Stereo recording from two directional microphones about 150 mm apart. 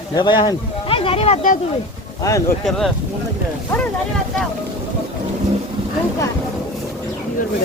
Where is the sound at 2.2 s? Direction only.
20° left (ahead or behind).